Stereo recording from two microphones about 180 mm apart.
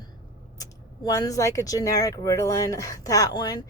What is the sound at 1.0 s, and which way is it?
A woman's voice, 20° left (ahead or behind).